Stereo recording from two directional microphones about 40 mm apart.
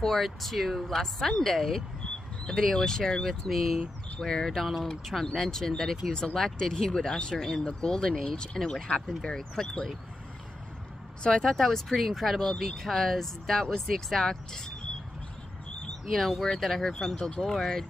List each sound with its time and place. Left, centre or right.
0.0 s speech: centre
3.4 s speech: centre
4.2 s speech: centre
4.5 s speech: centre
7.3 s speech: centre
11.2 s speech: centre
11.5 s speech: centre
16.1 s speech: centre